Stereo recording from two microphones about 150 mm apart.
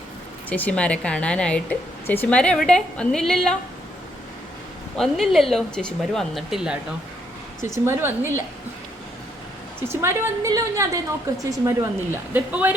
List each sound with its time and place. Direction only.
0.5 s a woman's voice: 10° left (ahead or behind)
4.9 s a woman's voice: centre (ahead or behind)
7.9 s speech: 15° right (ahead or behind)
9.8 s a woman's voice: 15° right (ahead or behind)